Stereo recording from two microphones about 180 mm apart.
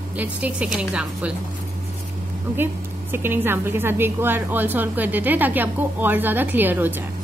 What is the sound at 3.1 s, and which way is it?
A woman's voice, 10° right (ahead or behind).